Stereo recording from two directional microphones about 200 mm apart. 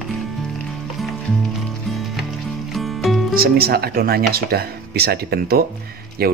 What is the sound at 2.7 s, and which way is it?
Music, centre (ahead or behind).